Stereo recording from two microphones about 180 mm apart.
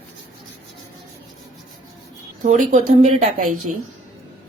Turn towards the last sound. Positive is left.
turn(degrees=-45)  # may be behind; listen again after turning